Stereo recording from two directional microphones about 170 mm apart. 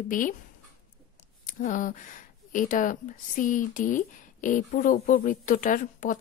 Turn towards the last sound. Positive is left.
turn(degrees=50)  # may be behind; listen again after turning